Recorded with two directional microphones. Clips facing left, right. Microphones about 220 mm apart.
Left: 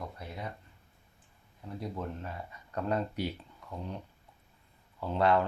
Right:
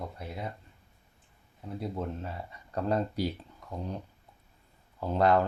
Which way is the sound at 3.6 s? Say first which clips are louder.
Right 3 dB; 40° right (ahead or behind).